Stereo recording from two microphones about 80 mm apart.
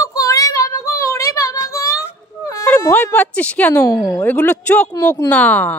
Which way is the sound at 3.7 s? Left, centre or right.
Left.